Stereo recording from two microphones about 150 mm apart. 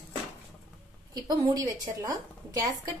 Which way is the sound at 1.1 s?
30° right (ahead or behind).